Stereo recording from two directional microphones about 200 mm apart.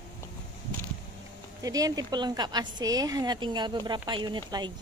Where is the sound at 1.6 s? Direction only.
20° right (ahead or behind).